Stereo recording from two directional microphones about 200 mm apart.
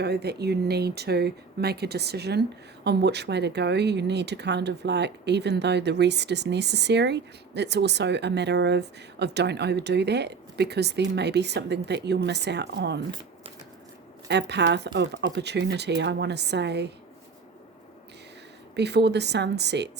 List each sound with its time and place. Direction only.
0.0 s speech: 55° right (ahead or behind)
14.3 s speech: 60° right (ahead or behind)
18.8 s speech: 55° right (ahead or behind)